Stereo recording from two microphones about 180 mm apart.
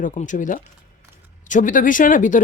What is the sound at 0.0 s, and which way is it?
Speech, 45° left (ahead or behind).